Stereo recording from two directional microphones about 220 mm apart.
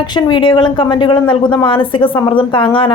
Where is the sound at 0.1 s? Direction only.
20° left (ahead or behind).